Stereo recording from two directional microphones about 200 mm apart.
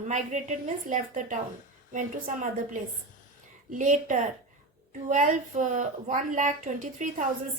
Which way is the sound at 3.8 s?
40° right (ahead or behind).